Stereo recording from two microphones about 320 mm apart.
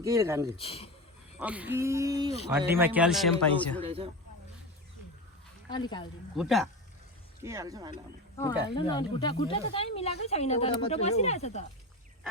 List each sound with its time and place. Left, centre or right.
0.0 s speech: centre
0.5 s speech: centre
1.4 s a man's voice: centre
3.8 s speech: centre
5.6 s speech: centre
6.3 s a man's voice: centre
8.4 s speech: centre